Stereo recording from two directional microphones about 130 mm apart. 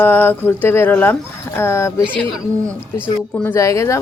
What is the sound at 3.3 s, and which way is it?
Speech, 15° left (ahead or behind).